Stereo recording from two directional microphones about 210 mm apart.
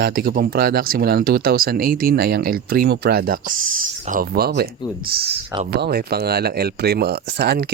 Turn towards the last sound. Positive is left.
turn(degrees=-50)  # may be behind; listen again after turning